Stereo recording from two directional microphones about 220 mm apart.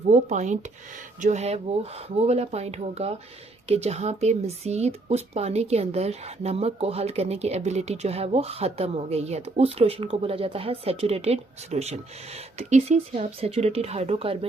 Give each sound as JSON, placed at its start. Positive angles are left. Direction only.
{"t": 0.1, "sound": "speech", "side_deg": -30}